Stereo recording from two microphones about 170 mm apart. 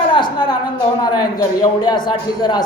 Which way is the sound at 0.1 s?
25° left (ahead or behind).